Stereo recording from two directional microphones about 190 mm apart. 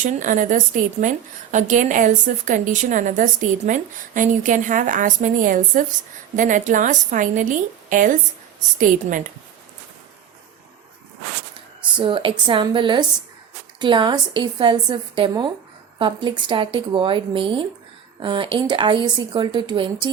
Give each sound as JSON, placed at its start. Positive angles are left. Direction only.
{"t": 0.0, "sound": "a woman's voice", "side_deg": -40}
{"t": 11.9, "sound": "speech", "side_deg": -25}